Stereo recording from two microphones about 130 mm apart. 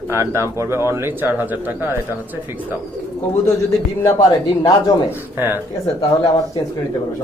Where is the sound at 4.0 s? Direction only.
25° left (ahead or behind).